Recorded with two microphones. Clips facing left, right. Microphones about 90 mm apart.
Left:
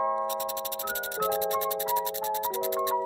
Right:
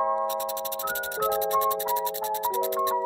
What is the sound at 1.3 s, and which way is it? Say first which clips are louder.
Music: right 2 dB; 25° right (ahead or behind).